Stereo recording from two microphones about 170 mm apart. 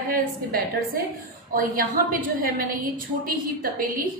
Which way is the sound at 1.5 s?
55° right (ahead or behind).